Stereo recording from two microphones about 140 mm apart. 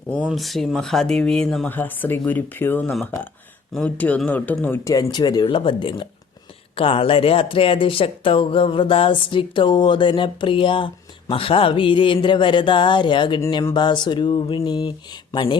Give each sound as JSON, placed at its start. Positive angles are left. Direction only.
{"t": 0.2, "sound": "speech", "side_deg": -5}
{"t": 2.8, "sound": "speech", "side_deg": 0}